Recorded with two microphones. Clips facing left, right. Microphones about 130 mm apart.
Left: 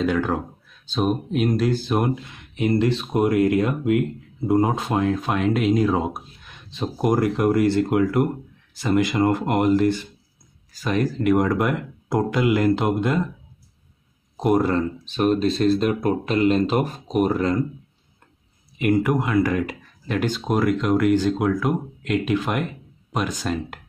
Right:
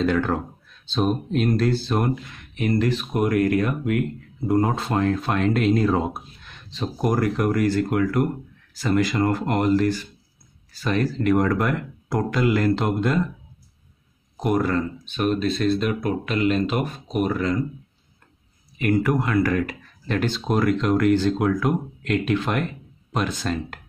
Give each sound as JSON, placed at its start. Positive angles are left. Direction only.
{"t": 0.0, "sound": "speech", "side_deg": 10}
{"t": 14.3, "sound": "speech", "side_deg": 25}
{"t": 18.8, "sound": "speech", "side_deg": 15}